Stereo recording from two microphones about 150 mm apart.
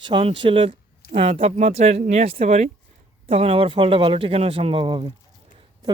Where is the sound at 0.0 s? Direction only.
35° right (ahead or behind).